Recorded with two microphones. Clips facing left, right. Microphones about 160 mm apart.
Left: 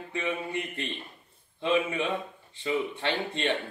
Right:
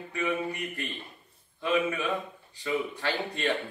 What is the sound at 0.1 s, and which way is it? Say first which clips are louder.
Speech: right 1 dB; 25° left (ahead or behind).